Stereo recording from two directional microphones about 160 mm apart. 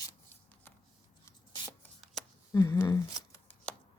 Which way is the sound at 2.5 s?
20° left (ahead or behind).